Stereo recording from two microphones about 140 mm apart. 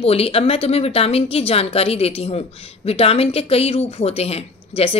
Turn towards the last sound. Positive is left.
turn(degrees=45)  # may be behind; listen again after turning